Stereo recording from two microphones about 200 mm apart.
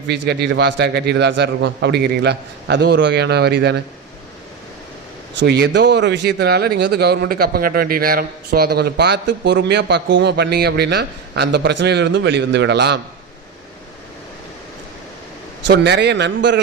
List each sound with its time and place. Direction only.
0.1 s speech: 55° right (ahead or behind)
5.4 s speech: 60° right (ahead or behind)
15.6 s speech: 60° right (ahead or behind)